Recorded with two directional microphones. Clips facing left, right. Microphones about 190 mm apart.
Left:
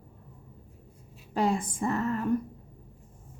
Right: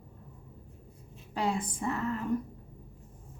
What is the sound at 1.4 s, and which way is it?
Speech, 45° left (ahead or behind).